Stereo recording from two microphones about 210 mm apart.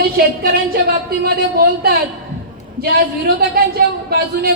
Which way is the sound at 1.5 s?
45° right (ahead or behind).